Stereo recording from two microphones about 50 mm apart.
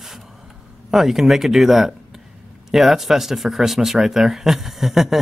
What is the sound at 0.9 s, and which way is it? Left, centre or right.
Speech, centre.